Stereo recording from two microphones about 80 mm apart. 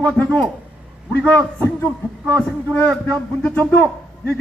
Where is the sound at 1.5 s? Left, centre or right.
Left.